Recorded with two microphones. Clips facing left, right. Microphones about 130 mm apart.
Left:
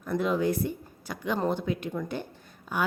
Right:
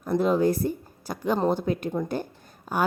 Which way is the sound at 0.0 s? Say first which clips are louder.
Right 5 dB; 35° right (ahead or behind).